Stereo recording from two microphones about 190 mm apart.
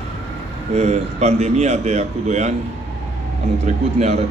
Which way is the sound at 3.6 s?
35° right (ahead or behind).